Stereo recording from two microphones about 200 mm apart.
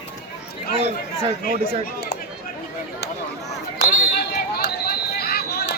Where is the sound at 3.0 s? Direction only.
55° left (ahead or behind).